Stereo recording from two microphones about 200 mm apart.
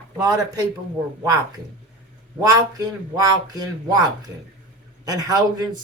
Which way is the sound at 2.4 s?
20° right (ahead or behind).